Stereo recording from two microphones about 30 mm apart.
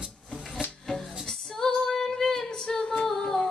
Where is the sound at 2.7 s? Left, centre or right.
Left.